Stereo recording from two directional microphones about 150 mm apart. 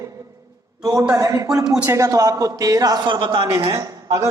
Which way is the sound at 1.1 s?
20° right (ahead or behind).